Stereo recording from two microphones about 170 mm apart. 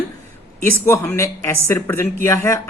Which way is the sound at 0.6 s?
15° left (ahead or behind).